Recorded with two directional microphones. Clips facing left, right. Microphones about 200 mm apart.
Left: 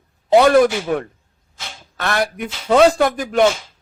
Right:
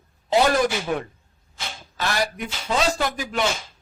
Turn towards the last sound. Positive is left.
turn(degrees=50)  # may be behind; listen again after turning